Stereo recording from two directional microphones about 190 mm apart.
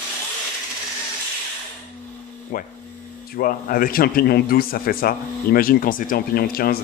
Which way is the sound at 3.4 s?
50° left (ahead or behind).